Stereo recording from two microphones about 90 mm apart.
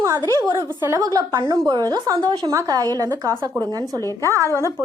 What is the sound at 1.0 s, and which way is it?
A woman's voice, 45° right (ahead or behind).